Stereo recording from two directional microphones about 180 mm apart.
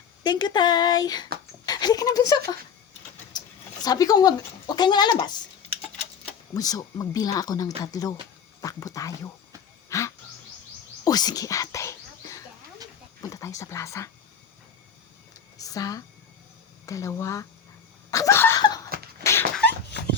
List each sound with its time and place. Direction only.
0.2 s speech: 25° left (ahead or behind)
3.3 s a sound: 20° left (ahead or behind)
3.8 s speech: 20° left (ahead or behind)
6.5 s speech: 20° left (ahead or behind)
9.9 s a sound: 15° left (ahead or behind)
11.0 s whispering: 20° left (ahead or behind)
13.2 s speech: 15° left (ahead or behind)
15.5 s speech: 20° left (ahead or behind)
18.1 s laughter: 15° left (ahead or behind)
18.6 s a sound: 20° left (ahead or behind)